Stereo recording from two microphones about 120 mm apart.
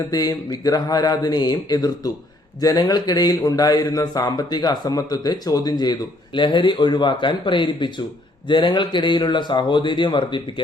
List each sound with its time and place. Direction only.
0.1 s speech: 30° left (ahead or behind)